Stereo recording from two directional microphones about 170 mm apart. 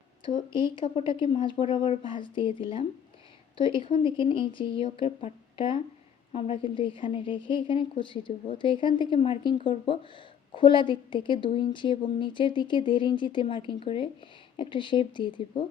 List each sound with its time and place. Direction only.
0.8 s a woman's voice: 30° left (ahead or behind)